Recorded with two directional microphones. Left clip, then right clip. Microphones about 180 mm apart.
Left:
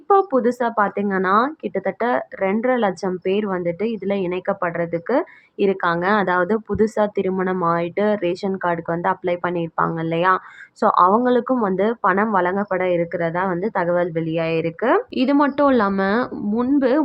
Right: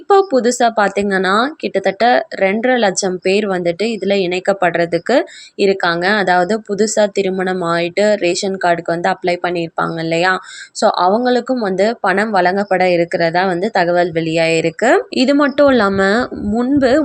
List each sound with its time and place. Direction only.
0.1 s speech: 15° right (ahead or behind)